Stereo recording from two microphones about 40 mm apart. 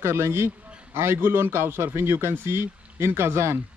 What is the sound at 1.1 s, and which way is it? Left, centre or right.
A man's voice, right.